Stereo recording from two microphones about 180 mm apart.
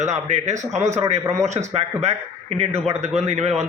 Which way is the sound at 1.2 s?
15° right (ahead or behind).